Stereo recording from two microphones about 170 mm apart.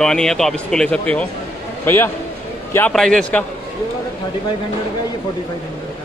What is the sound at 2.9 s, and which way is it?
Speech, 5° left (ahead or behind).